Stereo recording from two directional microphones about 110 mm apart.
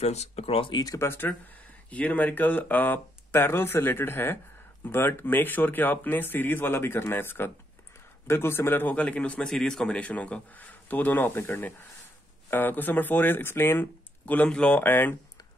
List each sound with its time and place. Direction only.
0.0 s speech: 80° left; by 0.8 s 50° left (ahead or behind)
0.8 s a man's voice: 25° left (ahead or behind)